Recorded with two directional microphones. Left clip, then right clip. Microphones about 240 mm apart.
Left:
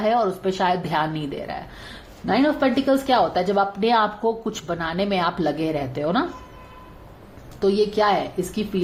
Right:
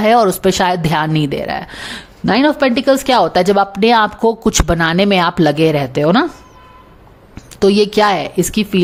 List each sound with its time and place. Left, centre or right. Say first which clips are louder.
0.0 s a woman's voice: right 10 dB; right
7.6 s a woman's voice: right 8 dB; right